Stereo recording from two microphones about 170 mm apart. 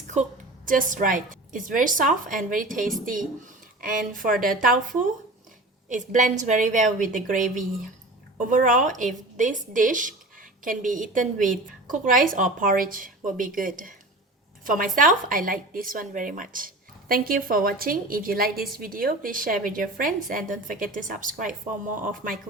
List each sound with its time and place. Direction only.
0.1 s a woman's voice: 50° right (ahead or behind)
8.4 s a woman's voice: 50° right (ahead or behind)